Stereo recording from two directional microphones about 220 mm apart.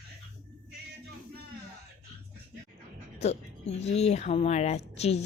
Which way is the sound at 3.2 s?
30° left (ahead or behind).